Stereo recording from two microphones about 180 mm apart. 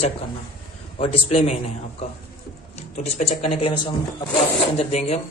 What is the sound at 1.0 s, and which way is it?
Speech, 35° left (ahead or behind).